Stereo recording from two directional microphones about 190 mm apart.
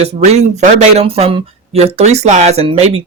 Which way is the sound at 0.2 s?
40° right (ahead or behind).